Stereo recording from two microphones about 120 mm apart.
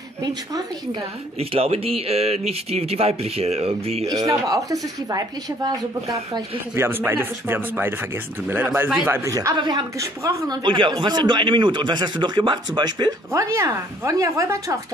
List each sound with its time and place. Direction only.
0.2 s speech: 30° right (ahead or behind)
1.4 s speech: 55° right (ahead or behind)
4.1 s speech: 30° right (ahead or behind)
6.7 s speech: 20° right (ahead or behind)
9.2 s speech: 25° right (ahead or behind)
9.6 s speech: 40° right (ahead or behind)
9.9 s speech: 25° right (ahead or behind)
10.6 s speech: 40° right (ahead or behind)
13.3 s speech: 25° right (ahead or behind)